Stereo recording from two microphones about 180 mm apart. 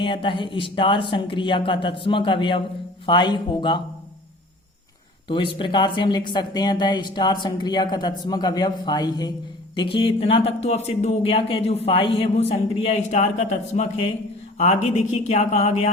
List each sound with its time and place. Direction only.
0.0 s speech: 30° left (ahead or behind)
5.3 s speech: 30° left (ahead or behind)